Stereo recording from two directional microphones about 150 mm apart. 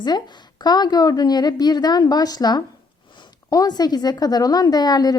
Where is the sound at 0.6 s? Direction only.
25° left (ahead or behind).